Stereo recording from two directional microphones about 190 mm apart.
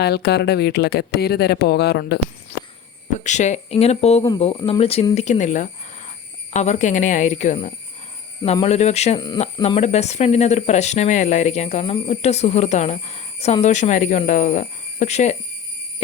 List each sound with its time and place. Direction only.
0.0 s speech: 60° left (ahead or behind)
3.2 s speech: 40° left (ahead or behind)